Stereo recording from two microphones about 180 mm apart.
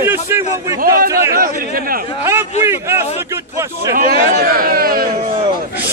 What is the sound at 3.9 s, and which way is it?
A man's voice, 55° right (ahead or behind).